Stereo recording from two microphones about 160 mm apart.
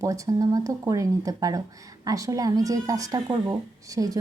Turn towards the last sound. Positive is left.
turn(degrees=-20)  # may be behind; listen again after turning